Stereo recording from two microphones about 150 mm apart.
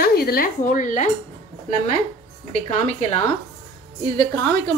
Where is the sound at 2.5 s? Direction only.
50° left (ahead or behind).